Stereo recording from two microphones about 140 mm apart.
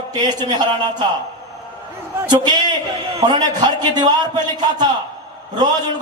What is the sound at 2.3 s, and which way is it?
A man's voice, 30° right (ahead or behind).